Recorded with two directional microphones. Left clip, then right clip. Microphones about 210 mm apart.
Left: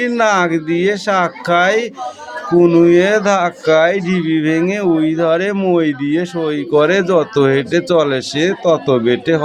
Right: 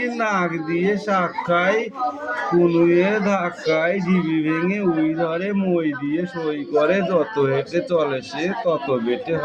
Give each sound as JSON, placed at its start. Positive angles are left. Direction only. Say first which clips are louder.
{"t": 0.0, "sound": "speech", "louder": "left 8 dB", "side_deg": 40}